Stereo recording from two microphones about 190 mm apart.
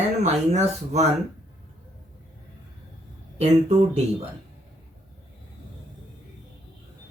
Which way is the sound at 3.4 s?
35° right (ahead or behind).